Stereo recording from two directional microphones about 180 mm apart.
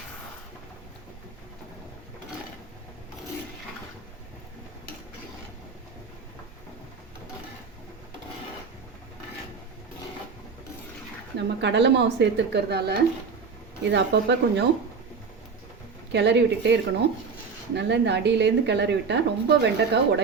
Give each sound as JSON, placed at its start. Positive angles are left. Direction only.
{"t": 11.3, "sound": "speech", "side_deg": -75}
{"t": 13.8, "sound": "speech", "side_deg": -75}
{"t": 16.1, "sound": "speech", "side_deg": -75}
{"t": 17.7, "sound": "speech", "side_deg": -70}